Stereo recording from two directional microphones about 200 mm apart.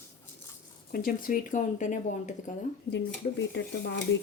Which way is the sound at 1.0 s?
45° left (ahead or behind).